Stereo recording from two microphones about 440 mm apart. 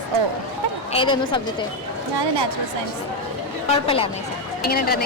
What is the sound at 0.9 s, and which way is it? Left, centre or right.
Speech, centre.